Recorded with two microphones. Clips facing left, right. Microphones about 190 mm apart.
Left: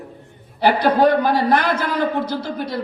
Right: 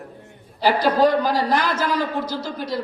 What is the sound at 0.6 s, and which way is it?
Singing, 60° left (ahead or behind).